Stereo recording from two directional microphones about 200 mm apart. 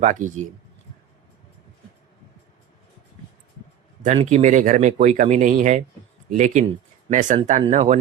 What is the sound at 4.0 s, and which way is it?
Speech, 35° right (ahead or behind).